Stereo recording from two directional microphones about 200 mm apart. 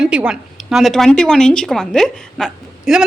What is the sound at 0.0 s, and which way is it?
A woman's voice, 5° right (ahead or behind).